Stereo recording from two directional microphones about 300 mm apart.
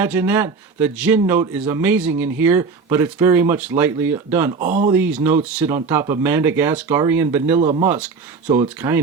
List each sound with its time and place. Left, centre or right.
0.0 s speech: centre
4.6 s speech: right
4.9 s speech: centre
7.6 s speech: centre
8.5 s speech: centre